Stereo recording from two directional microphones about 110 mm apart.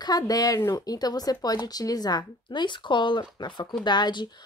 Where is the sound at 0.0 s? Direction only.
35° left (ahead or behind).